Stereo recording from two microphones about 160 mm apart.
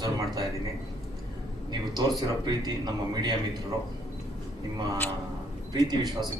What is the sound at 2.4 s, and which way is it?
Speech, 25° right (ahead or behind).